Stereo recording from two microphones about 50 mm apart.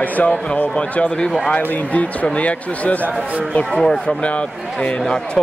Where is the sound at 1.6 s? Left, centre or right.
Left.